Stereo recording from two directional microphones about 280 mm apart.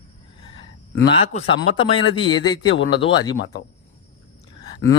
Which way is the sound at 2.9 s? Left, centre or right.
Centre.